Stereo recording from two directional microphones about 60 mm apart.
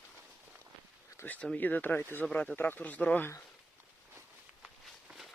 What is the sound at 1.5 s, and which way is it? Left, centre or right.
Speech, left.